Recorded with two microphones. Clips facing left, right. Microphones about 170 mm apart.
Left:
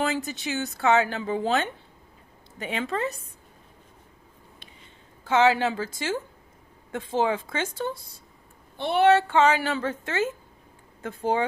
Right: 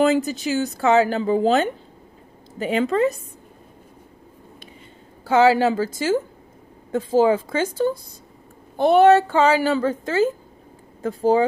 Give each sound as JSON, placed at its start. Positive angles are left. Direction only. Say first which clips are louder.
{"t": 0.0, "sound": "speech", "louder": "right 9 dB", "side_deg": -35}
{"t": 5.2, "sound": "speech", "louder": "right 5 dB", "side_deg": -35}
{"t": 8.9, "sound": "speech", "louder": "right 5 dB", "side_deg": -40}